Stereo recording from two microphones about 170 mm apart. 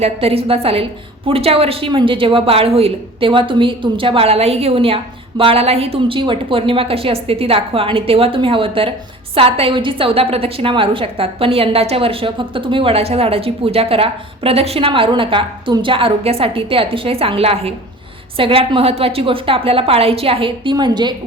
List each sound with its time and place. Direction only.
0.0 s a woman's voice: 35° right (ahead or behind)